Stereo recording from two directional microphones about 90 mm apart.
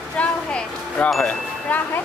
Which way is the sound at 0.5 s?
15° left (ahead or behind).